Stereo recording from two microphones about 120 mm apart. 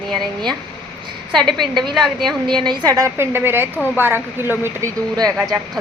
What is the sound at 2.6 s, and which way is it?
Speech, 35° right (ahead or behind).